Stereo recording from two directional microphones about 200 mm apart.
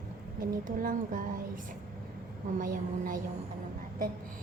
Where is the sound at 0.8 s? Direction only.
45° right (ahead or behind).